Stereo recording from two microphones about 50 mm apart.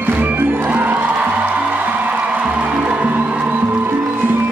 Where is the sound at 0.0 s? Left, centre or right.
Right.